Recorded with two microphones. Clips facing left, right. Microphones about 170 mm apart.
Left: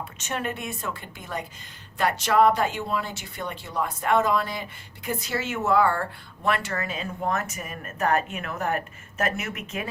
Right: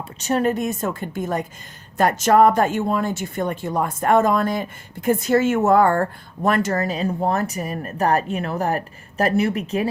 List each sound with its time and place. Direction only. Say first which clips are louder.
0.2 s speech: right 12 dB; 35° right (ahead or behind)